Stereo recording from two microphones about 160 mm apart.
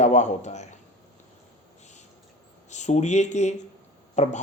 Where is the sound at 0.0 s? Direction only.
45° left (ahead or behind).